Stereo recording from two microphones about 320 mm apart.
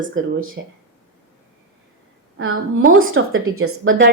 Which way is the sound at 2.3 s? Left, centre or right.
Right.